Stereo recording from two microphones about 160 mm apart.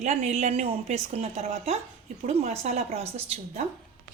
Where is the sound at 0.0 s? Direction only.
45° right (ahead or behind).